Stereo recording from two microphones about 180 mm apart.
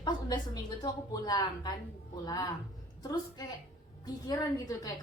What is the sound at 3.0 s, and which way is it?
A woman's voice, 20° left (ahead or behind).